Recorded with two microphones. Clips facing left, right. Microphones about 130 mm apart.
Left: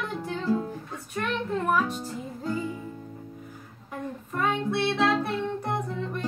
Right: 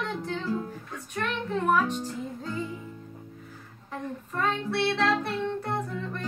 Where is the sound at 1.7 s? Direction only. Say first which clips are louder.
Right 1 dB; 5° left (ahead or behind).